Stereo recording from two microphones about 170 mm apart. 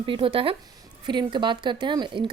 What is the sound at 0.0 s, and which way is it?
A woman's voice, 30° right (ahead or behind).